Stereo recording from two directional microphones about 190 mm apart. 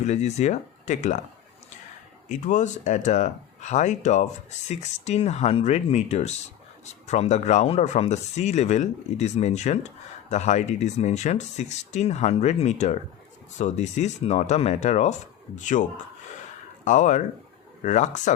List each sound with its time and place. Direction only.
0.0 s speech: 35° left (ahead or behind)
2.3 s speech: 40° left (ahead or behind)